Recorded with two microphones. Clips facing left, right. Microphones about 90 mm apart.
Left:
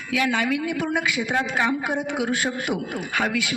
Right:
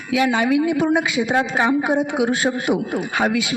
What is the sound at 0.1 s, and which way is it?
A man's voice, 25° right (ahead or behind).